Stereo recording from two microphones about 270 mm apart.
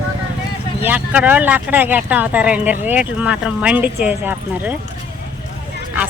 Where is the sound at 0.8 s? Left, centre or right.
Centre.